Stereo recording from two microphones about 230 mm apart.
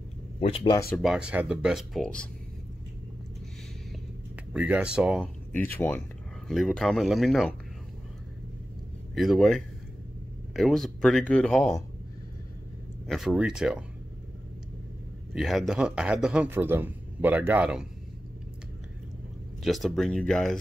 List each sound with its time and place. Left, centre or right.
0.4 s speech: left
0.7 s speech: centre
1.0 s a man's voice: centre
4.6 s a man's voice: centre
5.5 s speech: centre
9.1 s a man's voice: centre
13.0 s a man's voice: centre
15.3 s a man's voice: centre
19.6 s a man's voice: centre